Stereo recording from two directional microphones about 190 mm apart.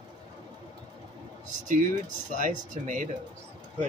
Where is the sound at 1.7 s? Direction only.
40° right (ahead or behind).